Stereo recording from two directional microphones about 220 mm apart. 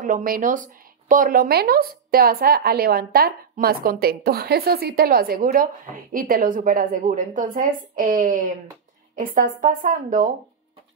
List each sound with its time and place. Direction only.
0.0 s a woman's voice: 40° right (ahead or behind)